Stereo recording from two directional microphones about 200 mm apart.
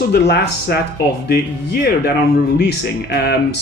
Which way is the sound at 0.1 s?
55° left (ahead or behind).